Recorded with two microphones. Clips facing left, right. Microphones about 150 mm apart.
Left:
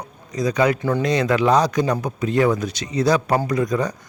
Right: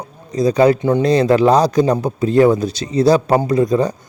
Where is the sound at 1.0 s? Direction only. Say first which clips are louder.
Right 6 dB; 30° right (ahead or behind).